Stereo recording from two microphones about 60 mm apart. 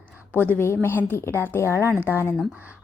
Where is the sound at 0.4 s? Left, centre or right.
Left.